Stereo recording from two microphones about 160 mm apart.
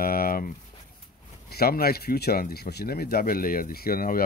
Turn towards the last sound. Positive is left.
turn(degrees=65)  # may be behind; listen again after turning